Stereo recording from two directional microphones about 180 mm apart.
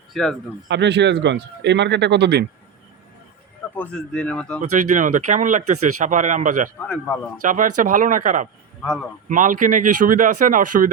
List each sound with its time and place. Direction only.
0.1 s speech: centre (ahead or behind)
0.7 s speech: 75° right (ahead or behind)
3.8 s speech: 5° left (ahead or behind)
4.6 s speech: 45° right (ahead or behind)
6.8 s a man's voice: 5° left (ahead or behind)
7.4 s speech: 45° right (ahead or behind)
8.8 s speech: centre (ahead or behind)
9.3 s speech: 45° right (ahead or behind)